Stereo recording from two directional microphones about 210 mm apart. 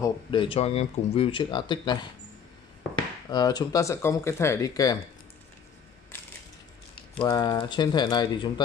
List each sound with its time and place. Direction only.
0.0 s speech: 25° left (ahead or behind)
3.3 s speech: 20° left (ahead or behind)
7.2 s speech: 20° left (ahead or behind)